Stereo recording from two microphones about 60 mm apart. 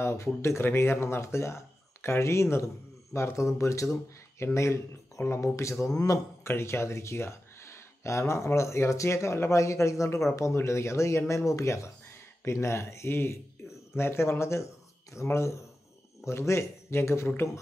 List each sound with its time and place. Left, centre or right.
0.0 s speech: left
6.4 s speech: left